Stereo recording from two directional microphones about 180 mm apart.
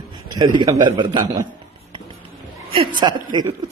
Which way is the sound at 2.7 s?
25° right (ahead or behind).